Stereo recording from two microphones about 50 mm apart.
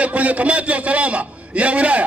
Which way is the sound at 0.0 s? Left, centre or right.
Right.